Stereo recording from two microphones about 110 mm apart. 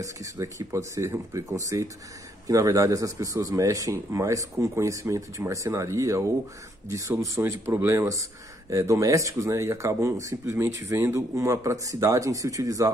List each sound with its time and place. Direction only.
0.0 s speech: 30° right (ahead or behind)